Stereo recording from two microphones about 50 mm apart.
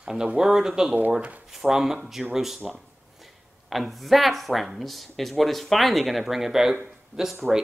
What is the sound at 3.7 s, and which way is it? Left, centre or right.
Speech, centre.